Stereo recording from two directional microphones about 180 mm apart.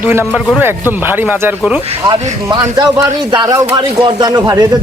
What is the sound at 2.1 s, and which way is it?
A man's voice, 25° right (ahead or behind).